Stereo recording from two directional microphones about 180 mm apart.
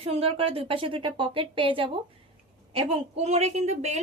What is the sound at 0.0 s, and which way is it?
A woman's voice, 30° right (ahead or behind).